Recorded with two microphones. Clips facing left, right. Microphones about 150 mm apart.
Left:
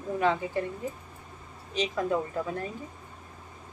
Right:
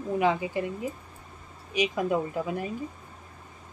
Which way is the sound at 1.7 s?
15° right (ahead or behind).